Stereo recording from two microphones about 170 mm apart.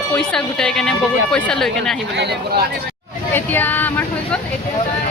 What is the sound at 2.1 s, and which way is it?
Speech, 85° right.